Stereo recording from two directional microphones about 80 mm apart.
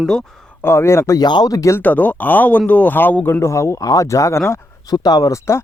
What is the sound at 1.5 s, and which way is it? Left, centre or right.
Speech, left.